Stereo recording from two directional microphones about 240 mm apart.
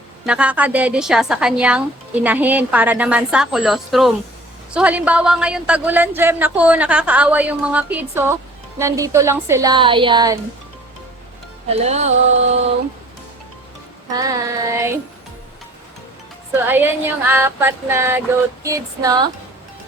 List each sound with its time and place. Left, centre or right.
0.3 s a woman's voice: centre
11.7 s music: right
14.1 s speech: centre
16.5 s speech: centre